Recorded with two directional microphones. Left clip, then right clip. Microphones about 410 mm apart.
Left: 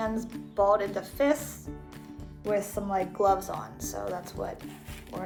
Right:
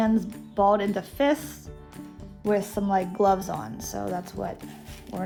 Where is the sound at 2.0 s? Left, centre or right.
Centre.